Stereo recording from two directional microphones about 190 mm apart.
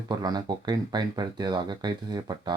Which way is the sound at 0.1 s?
20° right (ahead or behind).